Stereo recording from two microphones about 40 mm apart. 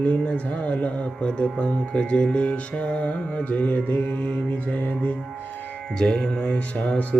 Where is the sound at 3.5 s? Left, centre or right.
Left.